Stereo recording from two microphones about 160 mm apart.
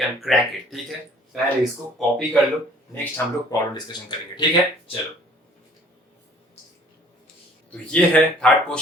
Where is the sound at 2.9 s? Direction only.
15° left (ahead or behind).